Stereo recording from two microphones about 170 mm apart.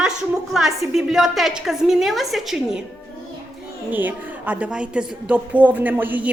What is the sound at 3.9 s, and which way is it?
Speech, 10° right (ahead or behind).